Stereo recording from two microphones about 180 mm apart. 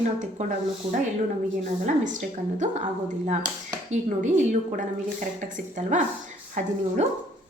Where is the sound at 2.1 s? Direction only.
40° right (ahead or behind).